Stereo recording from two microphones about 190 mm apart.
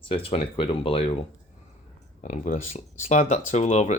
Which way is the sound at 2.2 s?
40° left (ahead or behind).